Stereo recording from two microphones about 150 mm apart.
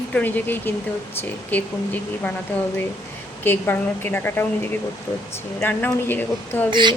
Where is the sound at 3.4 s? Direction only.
15° left (ahead or behind).